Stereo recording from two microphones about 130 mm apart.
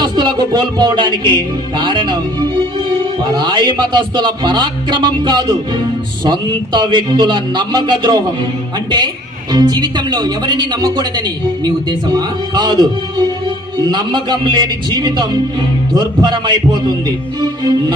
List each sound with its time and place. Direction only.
0.0 s a man's voice: 35° right (ahead or behind)
3.3 s a man's voice: 35° right (ahead or behind)
9.5 s a man's voice: 35° right (ahead or behind)